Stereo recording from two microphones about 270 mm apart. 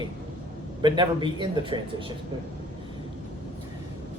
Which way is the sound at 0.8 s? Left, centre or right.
Centre.